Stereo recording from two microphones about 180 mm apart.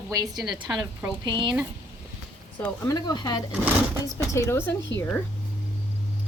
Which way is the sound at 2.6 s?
20° left (ahead or behind).